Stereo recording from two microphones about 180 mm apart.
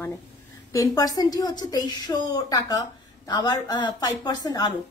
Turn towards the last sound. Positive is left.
turn(degrees=20)  # may be behind; listen again after turning